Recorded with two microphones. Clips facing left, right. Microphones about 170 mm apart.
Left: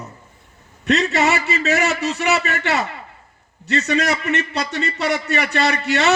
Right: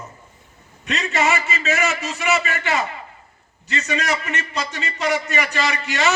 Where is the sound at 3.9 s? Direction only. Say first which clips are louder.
Left 3 dB; 65° left (ahead or behind).